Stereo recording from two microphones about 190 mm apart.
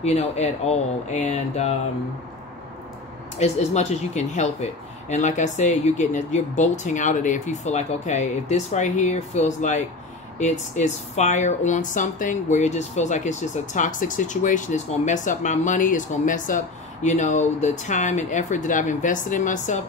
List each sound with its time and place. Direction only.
0.0 s speech: 35° left (ahead or behind)
3.3 s speech: 35° left (ahead or behind)